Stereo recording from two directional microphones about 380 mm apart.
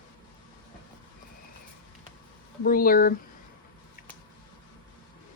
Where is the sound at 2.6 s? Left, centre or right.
Left.